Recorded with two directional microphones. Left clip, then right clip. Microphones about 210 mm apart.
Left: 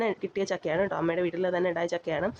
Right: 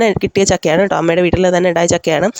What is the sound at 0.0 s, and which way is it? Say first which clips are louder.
Speech: right 16 dB; 50° right (ahead or behind).